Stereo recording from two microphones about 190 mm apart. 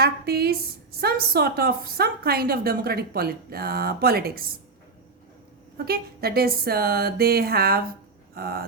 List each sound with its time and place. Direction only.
0.0 s a woman's voice: 55° right (ahead or behind)
5.7 s a woman's voice: 55° right (ahead or behind)